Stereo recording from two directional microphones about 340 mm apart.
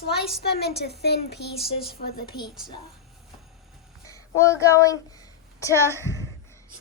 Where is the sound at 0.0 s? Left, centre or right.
Left.